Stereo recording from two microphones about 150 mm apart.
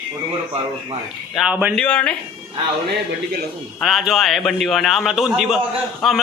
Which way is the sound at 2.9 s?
90° right.